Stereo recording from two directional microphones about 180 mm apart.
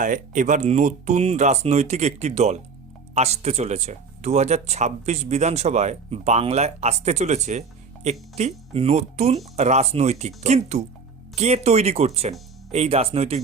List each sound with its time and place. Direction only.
0.0 s speech: 45° right (ahead or behind)